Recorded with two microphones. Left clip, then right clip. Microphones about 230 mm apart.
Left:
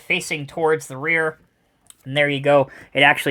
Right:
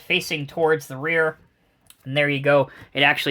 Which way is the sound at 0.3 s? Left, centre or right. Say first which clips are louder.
Left 1 dB; left.